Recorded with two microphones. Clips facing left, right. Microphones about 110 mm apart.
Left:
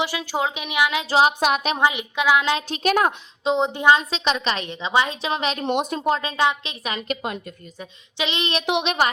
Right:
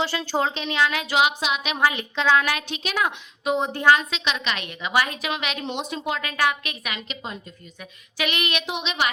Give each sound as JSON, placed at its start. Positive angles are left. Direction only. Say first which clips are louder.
{"t": 0.0, "sound": "speech", "louder": "even", "side_deg": 10}
{"t": 1.4, "sound": "a woman's voice", "louder": "left 6 dB", "side_deg": 50}
{"t": 1.7, "sound": "a woman's voice", "louder": "left 2 dB", "side_deg": 20}
{"t": 2.6, "sound": "a woman's voice", "louder": "left 6 dB", "side_deg": 45}
{"t": 3.4, "sound": "a woman's voice", "louder": "left 2 dB", "side_deg": 20}
{"t": 4.1, "sound": "a woman's voice", "louder": "left 4 dB", "side_deg": 35}
{"t": 5.6, "sound": "a woman's voice", "louder": "left 9 dB", "side_deg": 50}
{"t": 6.1, "sound": "a woman's voice", "louder": "left 2 dB", "side_deg": 25}
{"t": 7.1, "sound": "speech", "louder": "left 7 dB", "side_deg": 65}
{"t": 7.8, "sound": "a woman's voice", "louder": "left 1 dB", "side_deg": 25}
{"t": 8.6, "sound": "speech", "louder": "left 6 dB", "side_deg": 60}